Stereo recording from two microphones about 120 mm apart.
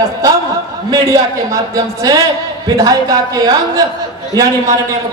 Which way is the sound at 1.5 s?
30° right (ahead or behind).